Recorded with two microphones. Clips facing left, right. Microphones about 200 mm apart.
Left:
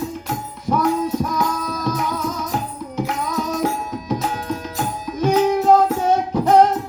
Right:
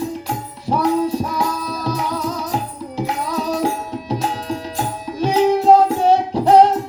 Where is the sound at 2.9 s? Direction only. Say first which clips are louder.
Right 1 dB; 30° right (ahead or behind).